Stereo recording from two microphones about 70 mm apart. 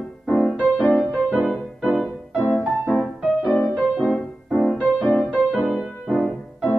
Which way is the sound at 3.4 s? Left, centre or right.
Centre.